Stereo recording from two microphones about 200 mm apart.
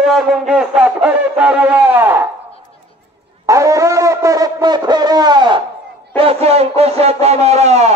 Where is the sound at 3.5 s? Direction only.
15° right (ahead or behind).